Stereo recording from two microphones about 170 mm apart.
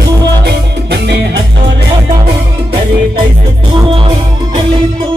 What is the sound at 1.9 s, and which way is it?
Music, 25° right (ahead or behind).